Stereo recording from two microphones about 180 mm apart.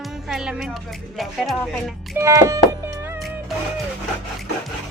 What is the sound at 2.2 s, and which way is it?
Music, 15° right (ahead or behind).